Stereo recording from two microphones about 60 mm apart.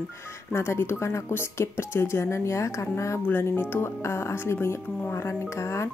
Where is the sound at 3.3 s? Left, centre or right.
Left.